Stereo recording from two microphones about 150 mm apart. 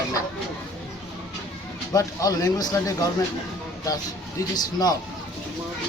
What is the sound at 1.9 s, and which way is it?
Speech, 20° left (ahead or behind).